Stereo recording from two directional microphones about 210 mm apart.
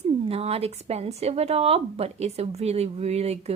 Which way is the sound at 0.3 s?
30° right (ahead or behind).